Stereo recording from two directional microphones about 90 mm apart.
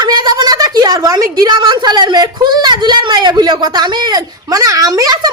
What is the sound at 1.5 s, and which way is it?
Speech, 60° right (ahead or behind).